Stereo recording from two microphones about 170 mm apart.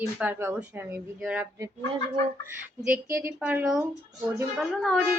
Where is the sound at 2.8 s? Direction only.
10° right (ahead or behind).